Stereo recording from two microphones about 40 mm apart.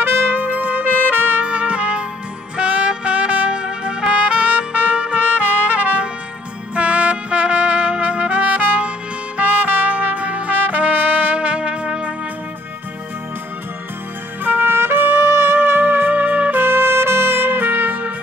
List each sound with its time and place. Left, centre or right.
0.0 s music: right
0.3 s music: right
1.4 s trumpet: right
2.5 s music: right
4.1 s trumpet: right
5.2 s trumpet: right
9.4 s music: right
10.6 s trumpet: right
14.4 s trumpet: right